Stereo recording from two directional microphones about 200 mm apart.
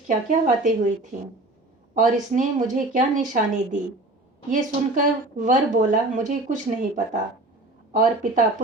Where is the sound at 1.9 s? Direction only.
40° right (ahead or behind).